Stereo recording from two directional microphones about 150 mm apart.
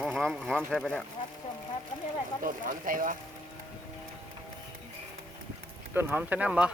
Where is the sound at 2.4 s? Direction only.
65° right (ahead or behind).